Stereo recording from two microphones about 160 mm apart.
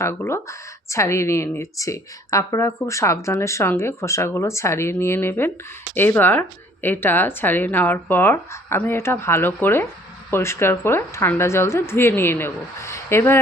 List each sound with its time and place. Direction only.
0.0 s speech: 15° left (ahead or behind)